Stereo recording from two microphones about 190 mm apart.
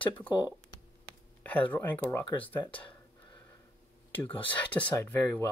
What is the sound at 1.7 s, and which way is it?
Speech, 10° left (ahead or behind).